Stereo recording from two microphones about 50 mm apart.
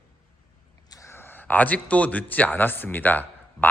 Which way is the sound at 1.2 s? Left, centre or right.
Left.